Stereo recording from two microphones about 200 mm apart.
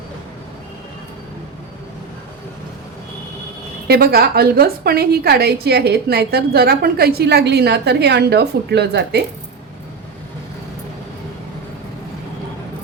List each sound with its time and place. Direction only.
3.8 s a woman's voice: 50° right (ahead or behind)